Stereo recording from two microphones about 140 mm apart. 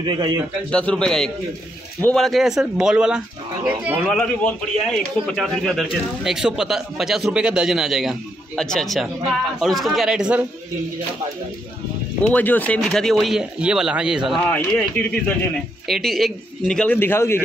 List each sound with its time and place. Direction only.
0.0 s speech: 30° right (ahead or behind)
0.7 s a man's voice: 5° left (ahead or behind)
4.2 s a man's voice: 5° left (ahead or behind)
12.3 s a man's voice: 10° left (ahead or behind); by 14.4 s 5° right (ahead or behind)
14.5 s a man's voice: 10° left (ahead or behind)